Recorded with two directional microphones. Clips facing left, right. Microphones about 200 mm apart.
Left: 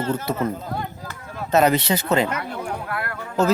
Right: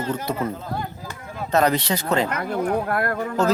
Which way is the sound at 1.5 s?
5° left (ahead or behind).